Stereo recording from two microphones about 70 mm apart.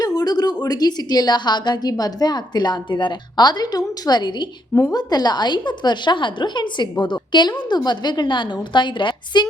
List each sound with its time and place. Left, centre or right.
0.0 s a sound: left
0.6 s a woman's voice: left
4.9 s a woman's voice: left